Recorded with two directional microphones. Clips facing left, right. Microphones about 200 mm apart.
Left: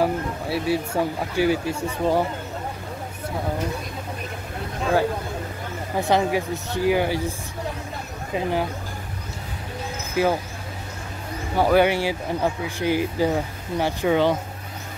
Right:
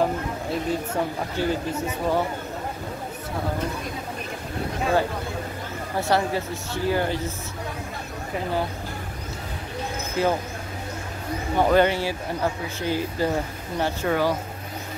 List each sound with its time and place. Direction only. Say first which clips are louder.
0.0 s a sound: left 1 dB; 10° left (ahead or behind)
1.0 s speech: left 3 dB; 5° left (ahead or behind)
5.9 s speech: left 2 dB; 15° left (ahead or behind)
8.4 s speech: left 3 dB; 15° left (ahead or behind)
10.2 s speech: left 2 dB; 10° left (ahead or behind)
11.5 s speech: left 1 dB; 10° left (ahead or behind)